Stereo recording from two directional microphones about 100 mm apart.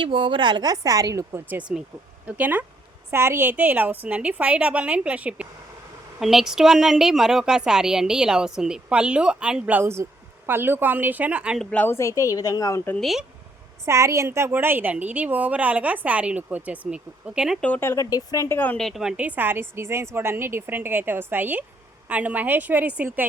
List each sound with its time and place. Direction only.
0.0 s a woman's voice: 60° right (ahead or behind); by 1.2 s 35° right (ahead or behind)
1.3 s a woman's voice: 15° right (ahead or behind)
11.7 s speech: 15° left (ahead or behind)
11.9 s a woman's voice: 30° left (ahead or behind)
13.0 s speech: centre (ahead or behind)
13.8 s speech: 30° right (ahead or behind); by 17.6 s 10° right (ahead or behind)
17.6 s speech: 15° left (ahead or behind)
17.8 s a woman's voice: 35° left (ahead or behind)
18.4 s speech: 20° left (ahead or behind)
18.8 s a woman's voice: centre (ahead or behind); by 23.0 s 15° right (ahead or behind)